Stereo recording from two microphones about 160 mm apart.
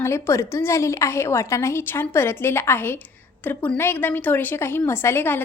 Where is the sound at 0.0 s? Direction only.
15° left (ahead or behind).